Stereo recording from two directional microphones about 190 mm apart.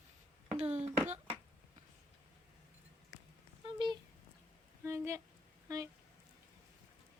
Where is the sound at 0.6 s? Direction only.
35° right (ahead or behind).